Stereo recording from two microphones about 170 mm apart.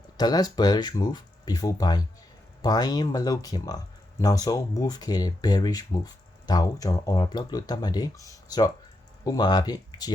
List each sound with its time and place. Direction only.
0.2 s speech: 25° left (ahead or behind)